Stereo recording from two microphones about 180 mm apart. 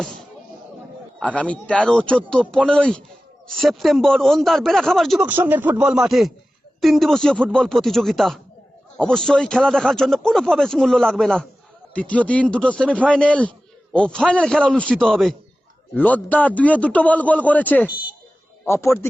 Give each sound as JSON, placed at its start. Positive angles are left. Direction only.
{"t": 1.2, "sound": "a man's voice", "side_deg": 5}